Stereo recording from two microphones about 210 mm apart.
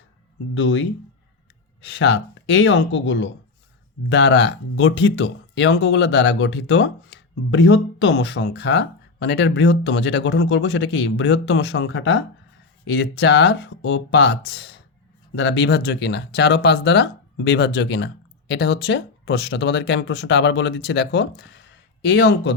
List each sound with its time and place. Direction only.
0.5 s speech: 60° left (ahead or behind)